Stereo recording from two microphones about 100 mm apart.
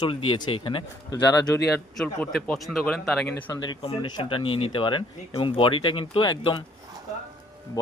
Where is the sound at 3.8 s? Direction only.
60° left (ahead or behind).